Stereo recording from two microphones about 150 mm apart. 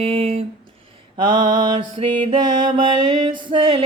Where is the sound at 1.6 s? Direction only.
35° right (ahead or behind).